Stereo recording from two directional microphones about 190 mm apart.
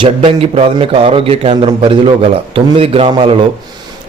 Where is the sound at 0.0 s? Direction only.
30° right (ahead or behind).